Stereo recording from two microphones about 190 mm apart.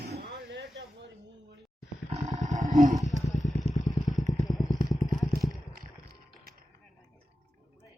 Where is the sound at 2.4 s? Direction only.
40° right (ahead or behind).